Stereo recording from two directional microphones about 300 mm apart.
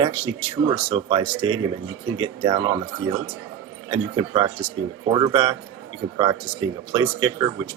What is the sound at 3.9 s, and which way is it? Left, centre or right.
Speech, centre.